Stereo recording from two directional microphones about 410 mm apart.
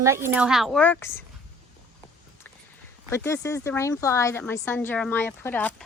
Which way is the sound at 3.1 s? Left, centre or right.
Centre.